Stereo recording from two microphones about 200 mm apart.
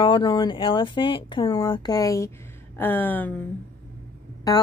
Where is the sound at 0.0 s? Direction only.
25° left (ahead or behind); by 3.4 s 10° left (ahead or behind).